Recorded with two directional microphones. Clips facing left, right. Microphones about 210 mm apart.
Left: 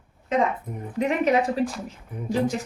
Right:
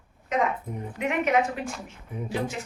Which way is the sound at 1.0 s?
35° left (ahead or behind).